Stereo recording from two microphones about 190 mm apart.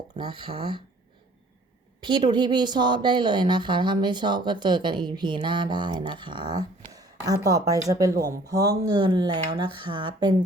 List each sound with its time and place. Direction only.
0.2 s a woman's voice: 25° right (ahead or behind)
2.0 s a woman's voice: 25° right (ahead or behind)